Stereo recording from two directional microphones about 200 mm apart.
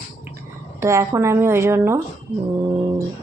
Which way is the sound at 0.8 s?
15° right (ahead or behind).